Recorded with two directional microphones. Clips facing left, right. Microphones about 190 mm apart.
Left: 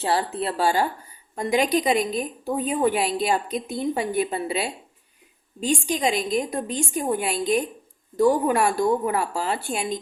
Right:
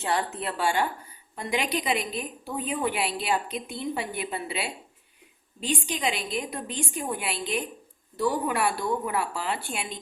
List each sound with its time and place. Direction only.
0.0 s a woman's voice: 35° left (ahead or behind)